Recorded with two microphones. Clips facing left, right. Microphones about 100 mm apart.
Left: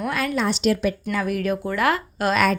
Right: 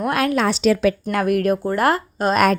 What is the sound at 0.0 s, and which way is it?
Speech, 60° right (ahead or behind).